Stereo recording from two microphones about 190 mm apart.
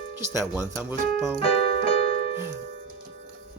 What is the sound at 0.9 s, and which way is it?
Speech, 10° right (ahead or behind).